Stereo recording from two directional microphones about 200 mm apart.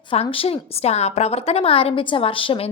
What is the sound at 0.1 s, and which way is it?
A woman's voice, 25° left (ahead or behind).